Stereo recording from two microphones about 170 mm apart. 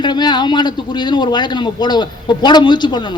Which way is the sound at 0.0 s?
25° left (ahead or behind).